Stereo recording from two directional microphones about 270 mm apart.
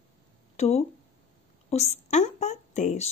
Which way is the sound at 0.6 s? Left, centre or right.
Left.